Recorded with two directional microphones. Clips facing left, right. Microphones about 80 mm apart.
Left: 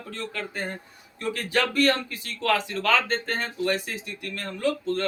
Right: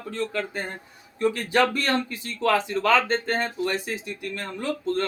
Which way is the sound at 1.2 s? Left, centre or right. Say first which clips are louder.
Right 5 dB; right.